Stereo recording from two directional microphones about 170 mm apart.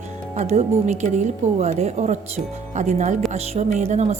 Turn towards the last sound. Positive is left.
turn(degrees=-40)  # may be behind; listen again after turning